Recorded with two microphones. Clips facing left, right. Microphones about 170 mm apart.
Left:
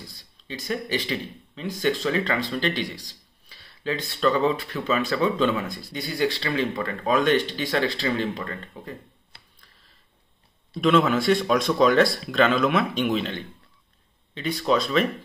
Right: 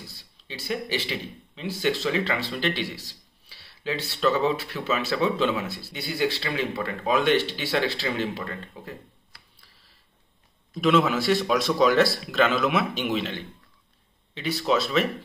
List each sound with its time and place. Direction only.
0.0 s speech: 5° right (ahead or behind)
9.3 s computer keyboard: 25° left (ahead or behind)
10.8 s speech: 5° right (ahead or behind)